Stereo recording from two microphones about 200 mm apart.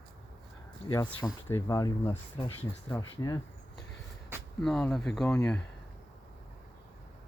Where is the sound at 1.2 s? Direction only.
15° left (ahead or behind).